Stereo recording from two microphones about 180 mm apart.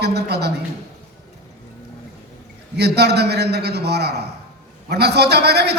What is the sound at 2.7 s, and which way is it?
A man's voice, 65° right (ahead or behind).